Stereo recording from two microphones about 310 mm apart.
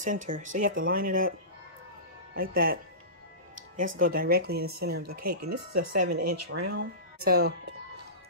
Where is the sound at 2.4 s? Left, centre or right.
Right.